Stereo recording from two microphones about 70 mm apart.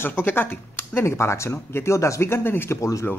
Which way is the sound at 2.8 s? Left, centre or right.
Left.